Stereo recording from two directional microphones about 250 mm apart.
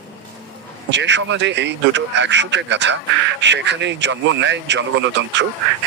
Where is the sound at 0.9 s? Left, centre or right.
Right.